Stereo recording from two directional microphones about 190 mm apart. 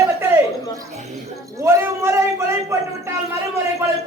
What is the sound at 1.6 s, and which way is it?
Speech, 15° right (ahead or behind).